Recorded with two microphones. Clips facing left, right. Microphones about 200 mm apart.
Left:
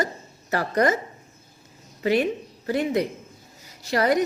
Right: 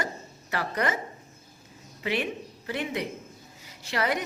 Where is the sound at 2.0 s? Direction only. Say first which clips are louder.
Left 8 dB; 40° left (ahead or behind).